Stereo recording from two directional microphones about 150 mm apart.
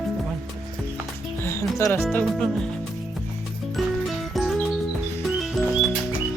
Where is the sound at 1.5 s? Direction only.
15° left (ahead or behind).